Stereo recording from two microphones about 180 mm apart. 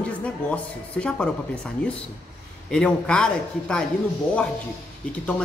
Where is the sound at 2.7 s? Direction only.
5° left (ahead or behind).